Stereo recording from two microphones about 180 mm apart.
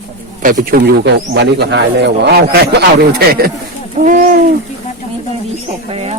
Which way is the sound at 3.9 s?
45° right (ahead or behind).